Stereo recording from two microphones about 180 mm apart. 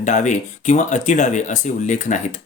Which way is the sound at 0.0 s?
40° left (ahead or behind).